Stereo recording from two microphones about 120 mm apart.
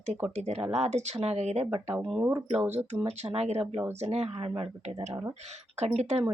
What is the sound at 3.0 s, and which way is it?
Speech, 60° right (ahead or behind).